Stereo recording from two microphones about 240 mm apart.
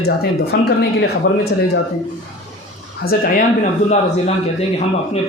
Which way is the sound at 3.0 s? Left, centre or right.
Left.